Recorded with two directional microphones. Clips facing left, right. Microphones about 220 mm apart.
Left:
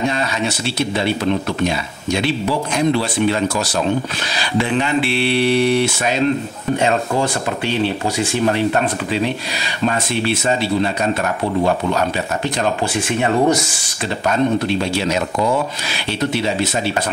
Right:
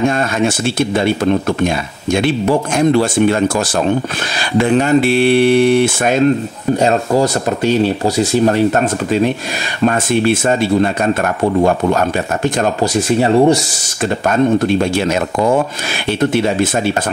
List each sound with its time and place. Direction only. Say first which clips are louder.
0.0 s speech: right 6 dB; 50° right (ahead or behind)
6.8 s speech: right 5 dB; 40° right (ahead or behind)
12.9 s speech: right 6 dB; 35° right (ahead or behind)
14.2 s speech: right 4 dB; 50° right (ahead or behind)